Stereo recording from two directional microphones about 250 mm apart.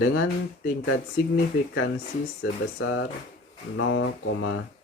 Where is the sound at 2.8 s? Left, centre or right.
Left.